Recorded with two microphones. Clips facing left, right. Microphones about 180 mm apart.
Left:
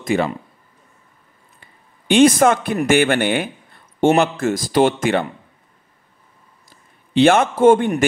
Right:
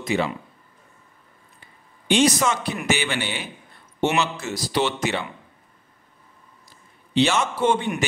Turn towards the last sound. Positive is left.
turn(degrees=50)  # may be behind; listen again after turning